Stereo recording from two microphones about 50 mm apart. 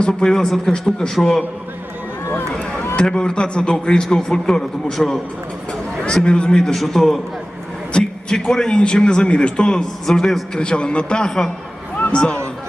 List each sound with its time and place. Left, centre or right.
0.0 s a man's voice: centre
2.5 s run: centre
3.0 s a man's voice: centre
7.9 s a man's voice: centre